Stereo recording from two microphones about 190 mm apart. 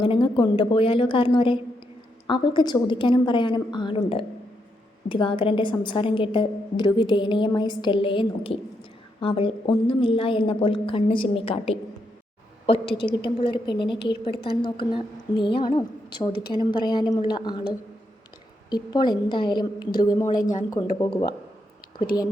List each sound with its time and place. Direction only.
0.0 s a woman's voice: 25° left (ahead or behind)
20.4 s speech: 40° left (ahead or behind)